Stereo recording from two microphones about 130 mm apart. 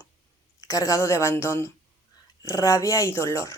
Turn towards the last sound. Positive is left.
turn(degrees=20)  # may be behind; listen again after turning